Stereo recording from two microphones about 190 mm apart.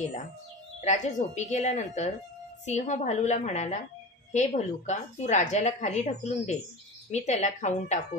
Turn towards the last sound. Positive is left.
turn(degrees=40)  # may be behind; listen again after turning